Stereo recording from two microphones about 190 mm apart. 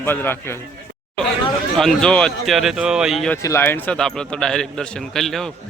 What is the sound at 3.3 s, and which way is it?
Speech, 15° left (ahead or behind).